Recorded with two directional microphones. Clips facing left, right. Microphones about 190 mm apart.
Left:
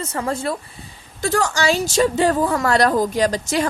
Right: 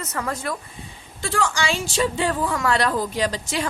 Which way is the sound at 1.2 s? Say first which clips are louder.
Left 5 dB; 40° left (ahead or behind).